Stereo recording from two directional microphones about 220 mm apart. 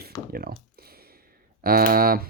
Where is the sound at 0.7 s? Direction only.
45° right (ahead or behind).